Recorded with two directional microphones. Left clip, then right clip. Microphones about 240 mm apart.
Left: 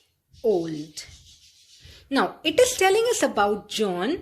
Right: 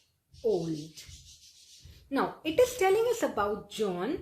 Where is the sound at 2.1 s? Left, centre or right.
Left.